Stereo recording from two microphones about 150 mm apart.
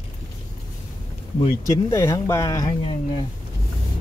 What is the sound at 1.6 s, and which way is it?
Speech, 20° left (ahead or behind).